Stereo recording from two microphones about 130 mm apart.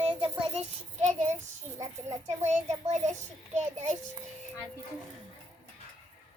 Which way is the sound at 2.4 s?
60° right (ahead or behind).